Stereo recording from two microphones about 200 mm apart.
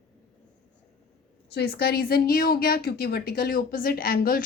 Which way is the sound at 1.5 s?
50° left (ahead or behind).